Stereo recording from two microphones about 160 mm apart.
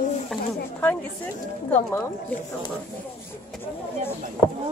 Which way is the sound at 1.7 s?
10° left (ahead or behind).